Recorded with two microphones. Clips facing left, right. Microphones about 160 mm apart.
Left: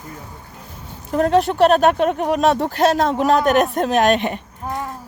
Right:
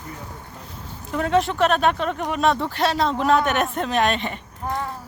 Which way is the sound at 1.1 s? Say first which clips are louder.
Left 5 dB; 45° left (ahead or behind).